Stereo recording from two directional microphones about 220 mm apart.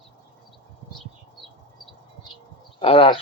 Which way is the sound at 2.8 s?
25° left (ahead or behind).